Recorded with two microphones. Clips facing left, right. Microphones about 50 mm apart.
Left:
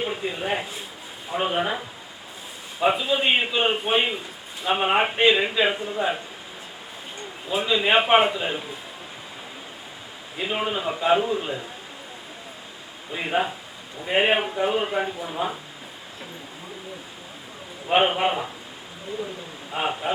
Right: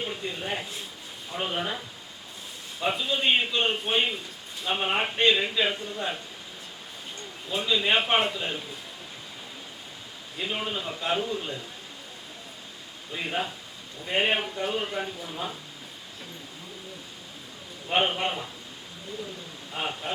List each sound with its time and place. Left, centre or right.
0.2 s a man's voice: centre
0.5 s speech: left
2.8 s a man's voice: centre
5.1 s a man's voice: centre
7.5 s a man's voice: centre
10.3 s a man's voice: centre
13.1 s a man's voice: left
17.8 s a man's voice: centre
19.7 s speech: left